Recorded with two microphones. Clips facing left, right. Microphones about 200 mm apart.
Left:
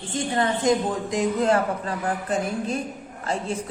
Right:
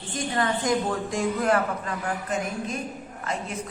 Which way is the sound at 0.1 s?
25° left (ahead or behind).